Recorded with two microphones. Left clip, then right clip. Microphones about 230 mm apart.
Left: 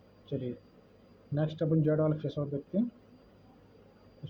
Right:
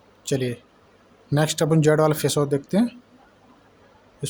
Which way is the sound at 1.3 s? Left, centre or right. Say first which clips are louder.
Right 10 dB; right.